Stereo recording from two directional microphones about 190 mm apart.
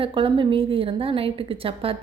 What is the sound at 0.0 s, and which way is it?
Speech, 25° right (ahead or behind).